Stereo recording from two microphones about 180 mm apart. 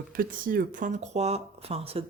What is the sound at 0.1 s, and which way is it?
Speech, 50° right (ahead or behind).